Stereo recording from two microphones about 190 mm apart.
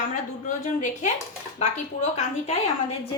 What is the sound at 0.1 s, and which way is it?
A woman's voice, 40° left (ahead or behind).